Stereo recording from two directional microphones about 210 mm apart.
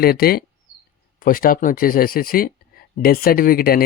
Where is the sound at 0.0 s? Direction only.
45° left (ahead or behind).